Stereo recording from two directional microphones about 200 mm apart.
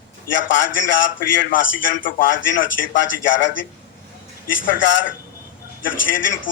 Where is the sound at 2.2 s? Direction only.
70° left (ahead or behind).